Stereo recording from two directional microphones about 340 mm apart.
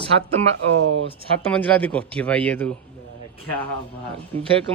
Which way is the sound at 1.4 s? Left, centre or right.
Centre.